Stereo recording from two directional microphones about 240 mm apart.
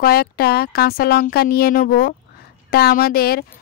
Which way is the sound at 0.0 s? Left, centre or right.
Left.